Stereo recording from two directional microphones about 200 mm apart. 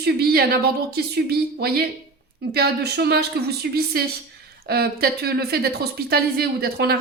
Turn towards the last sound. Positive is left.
turn(degrees=-50)  # may be behind; listen again after turning